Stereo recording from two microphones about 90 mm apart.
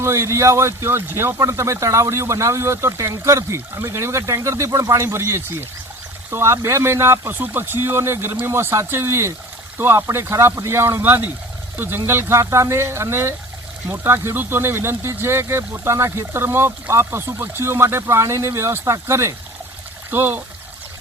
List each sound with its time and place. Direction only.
0.0 s speech: 30° right (ahead or behind)
4.9 s speech: 30° right (ahead or behind)